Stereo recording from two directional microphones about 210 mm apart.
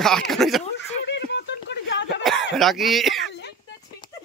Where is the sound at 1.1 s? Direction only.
55° left (ahead or behind).